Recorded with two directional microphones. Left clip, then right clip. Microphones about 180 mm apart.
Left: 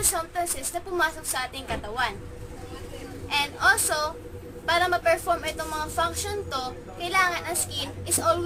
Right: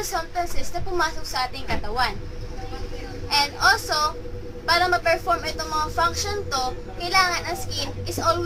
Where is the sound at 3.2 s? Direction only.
20° left (ahead or behind).